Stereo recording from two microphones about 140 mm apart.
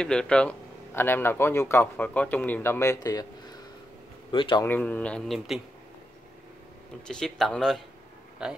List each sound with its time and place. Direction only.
0.0 s speech: 5° left (ahead or behind); by 3.5 s 25° left (ahead or behind)
4.3 s a man's voice: 35° left (ahead or behind)
4.6 s speech: 10° left (ahead or behind)
7.1 s speech: 5° left (ahead or behind)